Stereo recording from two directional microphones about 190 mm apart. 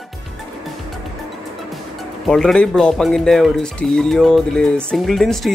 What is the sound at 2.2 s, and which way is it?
Speech, 5° left (ahead or behind).